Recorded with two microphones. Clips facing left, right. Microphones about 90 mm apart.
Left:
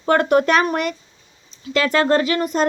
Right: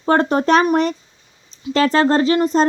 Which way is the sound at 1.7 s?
35° right (ahead or behind).